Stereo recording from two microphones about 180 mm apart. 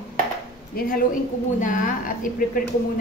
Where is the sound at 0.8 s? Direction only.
55° left (ahead or behind).